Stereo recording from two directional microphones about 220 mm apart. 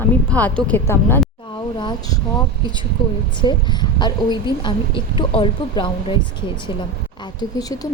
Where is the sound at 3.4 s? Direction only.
20° left (ahead or behind).